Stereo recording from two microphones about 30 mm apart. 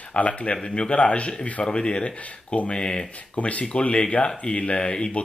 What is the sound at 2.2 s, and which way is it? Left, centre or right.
Speech, left.